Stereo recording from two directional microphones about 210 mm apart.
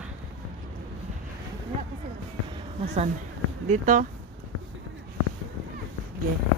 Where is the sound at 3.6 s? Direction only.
35° right (ahead or behind).